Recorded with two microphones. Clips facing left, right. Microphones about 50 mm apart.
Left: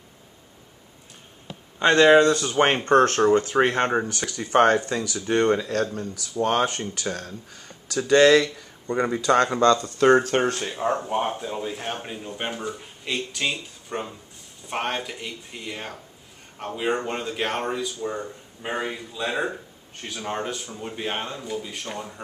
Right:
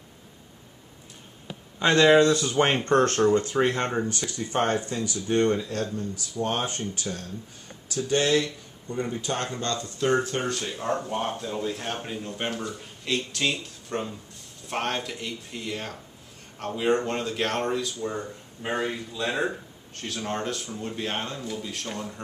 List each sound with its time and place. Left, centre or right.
1.8 s speech: centre
2.9 s speech: left
9.9 s speech: left
10.6 s speech: centre